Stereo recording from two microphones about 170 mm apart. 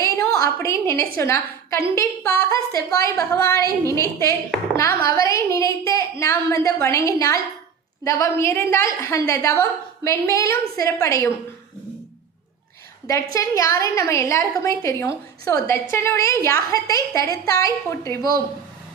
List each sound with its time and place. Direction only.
0.3 s a woman's voice: 20° left (ahead or behind)
13.1 s a woman's voice: 20° left (ahead or behind)